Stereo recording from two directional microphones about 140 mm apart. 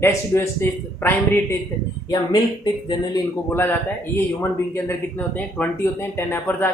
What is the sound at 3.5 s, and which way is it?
A man's voice, 15° left (ahead or behind).